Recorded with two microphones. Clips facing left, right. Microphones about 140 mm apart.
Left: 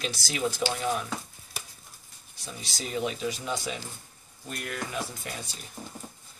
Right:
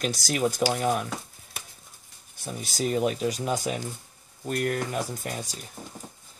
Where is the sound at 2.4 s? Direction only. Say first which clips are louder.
Right 9 dB; 50° right (ahead or behind).